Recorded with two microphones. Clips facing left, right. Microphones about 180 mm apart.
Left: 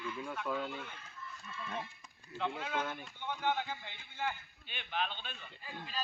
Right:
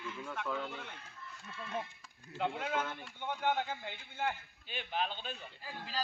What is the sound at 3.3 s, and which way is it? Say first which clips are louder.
A man's voice: right 1 dB; 50° right (ahead or behind).